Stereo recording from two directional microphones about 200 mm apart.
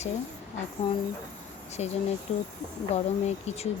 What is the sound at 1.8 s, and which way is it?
Speech, 30° left (ahead or behind).